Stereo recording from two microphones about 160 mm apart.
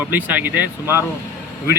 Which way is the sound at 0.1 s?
10° right (ahead or behind).